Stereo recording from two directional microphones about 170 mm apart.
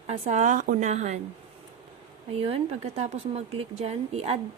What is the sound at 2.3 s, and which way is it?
Speech, 35° right (ahead or behind).